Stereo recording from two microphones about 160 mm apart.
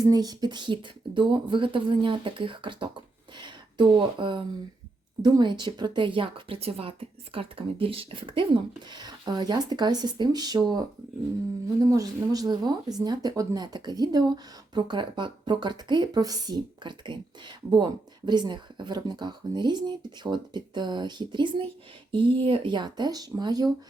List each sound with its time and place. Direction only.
0.0 s speech: 25° right (ahead or behind)
18.3 s speech: 30° right (ahead or behind)